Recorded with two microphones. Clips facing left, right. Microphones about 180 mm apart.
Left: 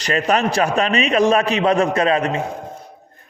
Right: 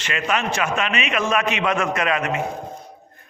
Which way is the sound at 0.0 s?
35° left (ahead or behind).